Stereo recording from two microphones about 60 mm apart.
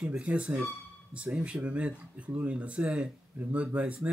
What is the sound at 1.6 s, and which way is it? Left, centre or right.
Speech, right.